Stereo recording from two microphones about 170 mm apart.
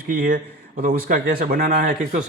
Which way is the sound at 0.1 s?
55° right (ahead or behind).